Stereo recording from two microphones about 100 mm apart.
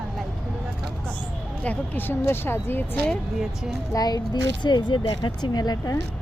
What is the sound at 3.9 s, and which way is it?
A child's voice, 40° left (ahead or behind).